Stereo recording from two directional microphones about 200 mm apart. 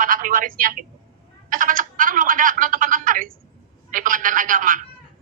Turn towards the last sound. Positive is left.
turn(degrees=-45)  # may be behind; listen again after turning